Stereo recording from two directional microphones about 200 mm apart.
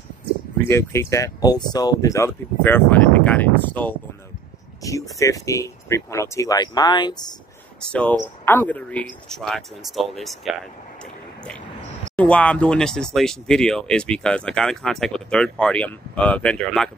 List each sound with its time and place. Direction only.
0.7 s speech: 15° left (ahead or behind)
7.8 s speech: 5° left (ahead or behind)
12.2 s speech: 5° left (ahead or behind)